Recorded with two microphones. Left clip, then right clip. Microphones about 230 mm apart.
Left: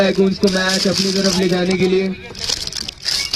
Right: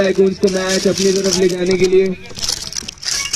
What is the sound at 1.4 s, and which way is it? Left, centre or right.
Speech, left.